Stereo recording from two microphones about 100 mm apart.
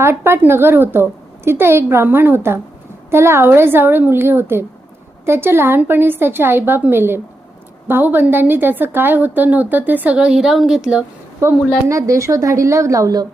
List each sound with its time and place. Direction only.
0.0 s a woman's voice: 25° right (ahead or behind); by 11.0 s 10° right (ahead or behind)
11.4 s a woman's voice: 30° right (ahead or behind)